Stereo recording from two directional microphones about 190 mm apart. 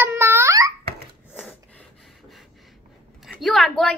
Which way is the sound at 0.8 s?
55° right (ahead or behind).